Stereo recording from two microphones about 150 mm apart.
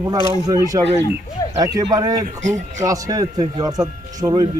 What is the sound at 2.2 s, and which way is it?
Speech, 55° right (ahead or behind).